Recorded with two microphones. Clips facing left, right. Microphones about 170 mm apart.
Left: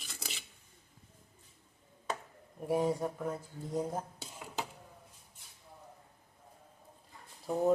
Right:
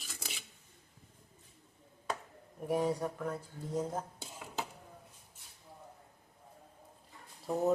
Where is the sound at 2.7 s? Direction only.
20° left (ahead or behind).